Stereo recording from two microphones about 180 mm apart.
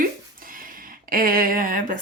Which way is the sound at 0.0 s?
50° right (ahead or behind).